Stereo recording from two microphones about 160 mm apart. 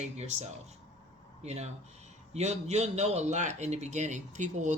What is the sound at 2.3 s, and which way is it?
Speech, 45° right (ahead or behind).